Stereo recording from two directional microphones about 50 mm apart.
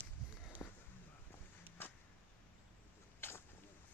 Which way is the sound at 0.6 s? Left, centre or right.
Left.